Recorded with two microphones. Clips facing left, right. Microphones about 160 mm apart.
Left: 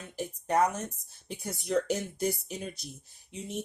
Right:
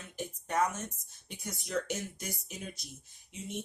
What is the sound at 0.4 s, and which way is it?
Speech, 35° left (ahead or behind).